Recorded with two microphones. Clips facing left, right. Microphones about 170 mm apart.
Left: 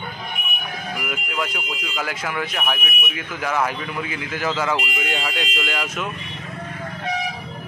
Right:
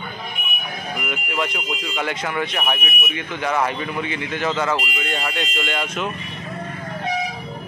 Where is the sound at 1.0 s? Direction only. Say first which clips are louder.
Right 3 dB; 5° left (ahead or behind).